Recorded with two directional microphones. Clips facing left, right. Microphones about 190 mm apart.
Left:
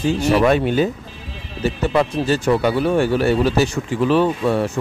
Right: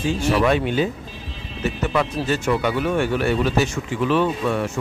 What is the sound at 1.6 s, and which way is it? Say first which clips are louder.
Speech: left 4 dB; 35° left (ahead or behind).